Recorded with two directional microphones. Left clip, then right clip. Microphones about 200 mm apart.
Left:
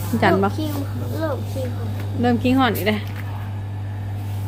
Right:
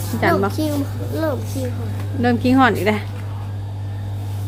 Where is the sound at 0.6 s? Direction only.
35° right (ahead or behind).